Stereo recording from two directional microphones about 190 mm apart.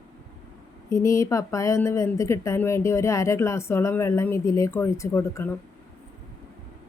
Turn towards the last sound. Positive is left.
turn(degrees=15)  # may be behind; listen again after turning